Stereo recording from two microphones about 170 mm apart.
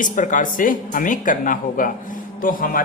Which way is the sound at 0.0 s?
50° left (ahead or behind).